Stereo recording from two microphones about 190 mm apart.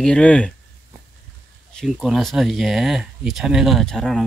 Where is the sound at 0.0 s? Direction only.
5° left (ahead or behind).